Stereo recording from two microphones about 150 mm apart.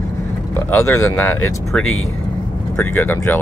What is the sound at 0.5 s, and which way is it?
Speech, 15° left (ahead or behind).